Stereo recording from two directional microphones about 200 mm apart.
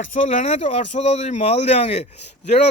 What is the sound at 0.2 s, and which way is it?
Speech, 35° left (ahead or behind).